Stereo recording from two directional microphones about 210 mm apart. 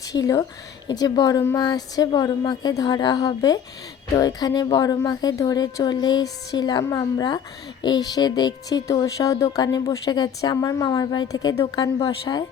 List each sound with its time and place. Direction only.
0.1 s a woman's voice: 15° left (ahead or behind)